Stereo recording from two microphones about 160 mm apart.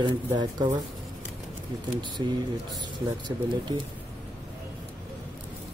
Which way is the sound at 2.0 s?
30° right (ahead or behind).